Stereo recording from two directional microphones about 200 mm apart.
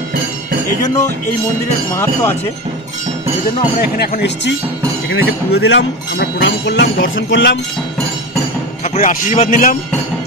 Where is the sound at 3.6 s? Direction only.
50° left (ahead or behind).